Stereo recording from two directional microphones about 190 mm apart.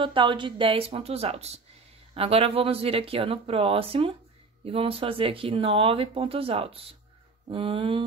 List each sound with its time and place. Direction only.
0.0 s speech: 25° right (ahead or behind)